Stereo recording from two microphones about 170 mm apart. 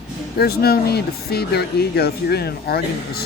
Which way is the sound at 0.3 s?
65° left (ahead or behind).